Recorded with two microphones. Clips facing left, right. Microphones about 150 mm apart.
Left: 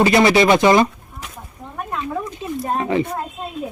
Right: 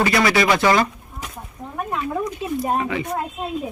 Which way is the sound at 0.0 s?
25° left (ahead or behind).